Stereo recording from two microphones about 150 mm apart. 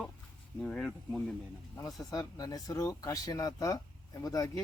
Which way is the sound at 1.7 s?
25° left (ahead or behind).